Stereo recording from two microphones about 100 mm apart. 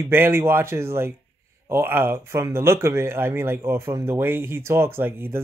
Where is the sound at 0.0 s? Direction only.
25° right (ahead or behind).